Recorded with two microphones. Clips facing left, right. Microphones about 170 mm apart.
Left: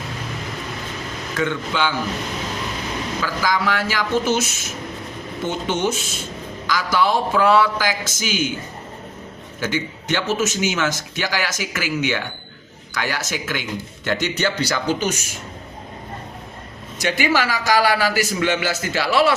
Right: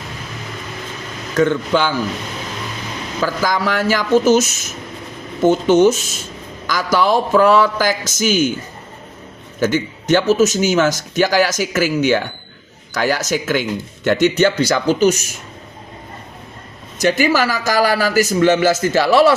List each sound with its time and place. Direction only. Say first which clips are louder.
1.4 s a man's voice: right 7 dB; 40° right (ahead or behind)
3.2 s a man's voice: right 5 dB; 40° right (ahead or behind)
9.6 s a man's voice: right 7 dB; 45° right (ahead or behind)
17.1 s speech: right 4 dB; 40° right (ahead or behind)